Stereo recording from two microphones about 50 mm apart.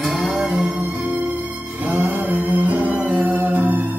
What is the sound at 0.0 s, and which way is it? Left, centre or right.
Cattle, centre.